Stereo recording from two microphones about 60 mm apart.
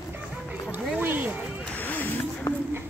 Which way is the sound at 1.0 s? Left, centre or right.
Right.